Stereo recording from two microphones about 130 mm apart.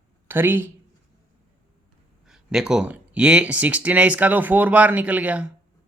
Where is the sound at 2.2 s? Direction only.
5° right (ahead or behind).